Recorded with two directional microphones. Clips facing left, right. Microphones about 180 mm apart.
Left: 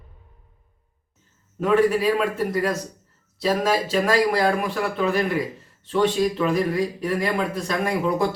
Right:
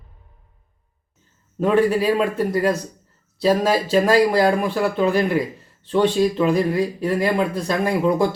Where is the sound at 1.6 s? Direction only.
25° right (ahead or behind).